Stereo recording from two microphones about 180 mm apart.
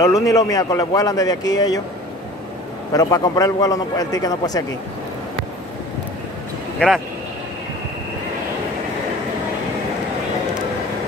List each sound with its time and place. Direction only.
0.0 s a man's voice: 20° left (ahead or behind)
2.9 s a man's voice: 20° left (ahead or behind)